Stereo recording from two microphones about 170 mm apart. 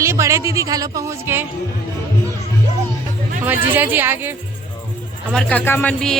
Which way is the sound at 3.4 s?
10° right (ahead or behind).